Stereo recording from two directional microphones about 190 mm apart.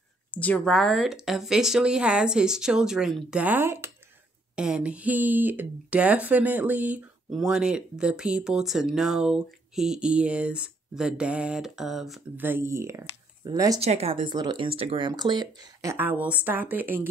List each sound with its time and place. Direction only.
0.3 s speech: 5° left (ahead or behind); by 13.7 s 20° right (ahead or behind)
13.7 s speech: 35° right (ahead or behind); by 17.1 s 10° right (ahead or behind)